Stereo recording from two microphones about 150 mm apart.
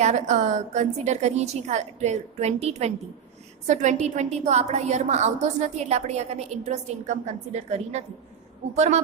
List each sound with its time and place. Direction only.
0.0 s a woman's voice: 50° right (ahead or behind)